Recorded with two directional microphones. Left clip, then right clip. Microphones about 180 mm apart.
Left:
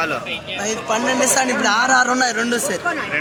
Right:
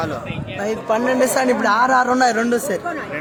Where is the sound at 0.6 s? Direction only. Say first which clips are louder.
Right 2 dB; 55° right (ahead or behind).